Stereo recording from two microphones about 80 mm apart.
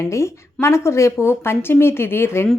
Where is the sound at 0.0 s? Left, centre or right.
Left.